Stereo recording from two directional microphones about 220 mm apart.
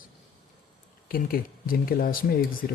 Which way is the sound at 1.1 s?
40° left (ahead or behind).